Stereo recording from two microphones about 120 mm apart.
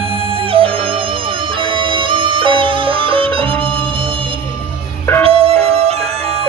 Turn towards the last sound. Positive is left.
turn(degrees=-55)  # may be behind; listen again after turning